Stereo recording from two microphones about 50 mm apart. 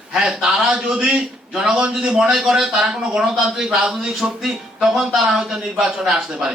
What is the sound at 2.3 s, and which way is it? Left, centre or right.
A man's voice, centre.